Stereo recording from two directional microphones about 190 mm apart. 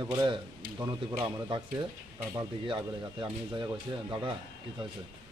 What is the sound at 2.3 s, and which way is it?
Speech, 25° right (ahead or behind).